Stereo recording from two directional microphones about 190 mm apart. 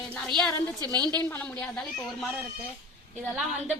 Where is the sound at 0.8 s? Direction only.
20° right (ahead or behind).